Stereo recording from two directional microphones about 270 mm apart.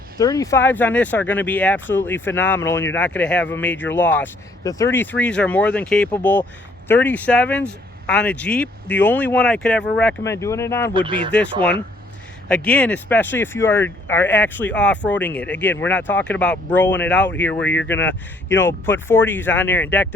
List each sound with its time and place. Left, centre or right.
0.2 s speech: centre
10.9 s speech: centre
12.5 s speech: centre